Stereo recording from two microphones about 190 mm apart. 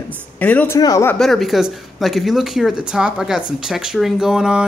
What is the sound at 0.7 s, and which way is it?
Speech, 20° left (ahead or behind).